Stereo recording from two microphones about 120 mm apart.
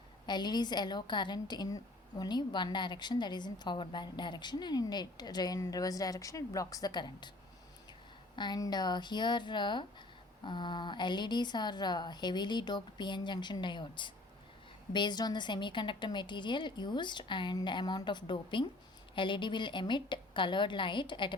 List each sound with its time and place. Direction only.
0.3 s a woman's voice: 35° left (ahead or behind)
8.4 s a woman's voice: 35° left (ahead or behind)